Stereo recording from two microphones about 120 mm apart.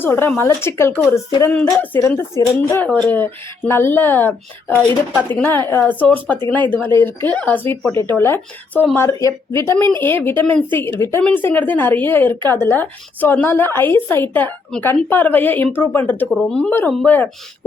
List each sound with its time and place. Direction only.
0.0 s speech: 20° left (ahead or behind)
9.0 s speech: 25° left (ahead or behind)
16.3 s speech: 5° left (ahead or behind)